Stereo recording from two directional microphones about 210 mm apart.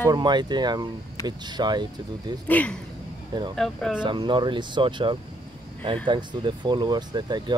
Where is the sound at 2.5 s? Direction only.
5° left (ahead or behind).